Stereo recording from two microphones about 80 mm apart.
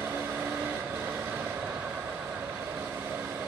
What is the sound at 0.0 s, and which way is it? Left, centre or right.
Vehicle, right.